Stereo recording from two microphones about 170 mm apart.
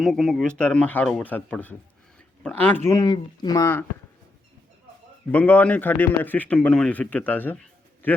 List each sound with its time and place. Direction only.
0.0 s speech: centre (ahead or behind); by 3.7 s 25° left (ahead or behind)
5.3 s speech: 10° left (ahead or behind)